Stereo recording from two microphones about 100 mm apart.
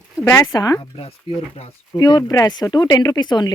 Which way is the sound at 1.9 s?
40° left (ahead or behind).